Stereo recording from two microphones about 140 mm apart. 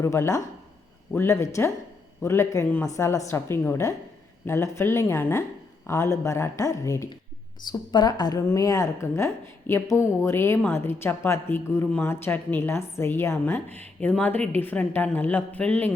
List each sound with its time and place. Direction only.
0.0 s a woman's voice: 20° left (ahead or behind)